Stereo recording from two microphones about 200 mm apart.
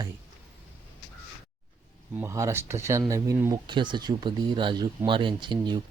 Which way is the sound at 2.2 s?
15° right (ahead or behind).